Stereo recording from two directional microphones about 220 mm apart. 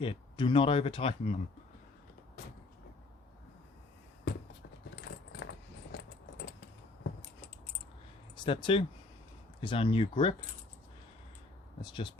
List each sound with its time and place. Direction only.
0.0 s speech: 20° left (ahead or behind)
4.9 s keys jangling: 45° left (ahead or behind)
8.4 s speech: 25° left (ahead or behind)
11.8 s speech: 20° left (ahead or behind)